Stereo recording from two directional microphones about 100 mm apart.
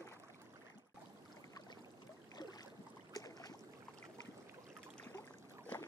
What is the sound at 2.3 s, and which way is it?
Boat, 45° left (ahead or behind).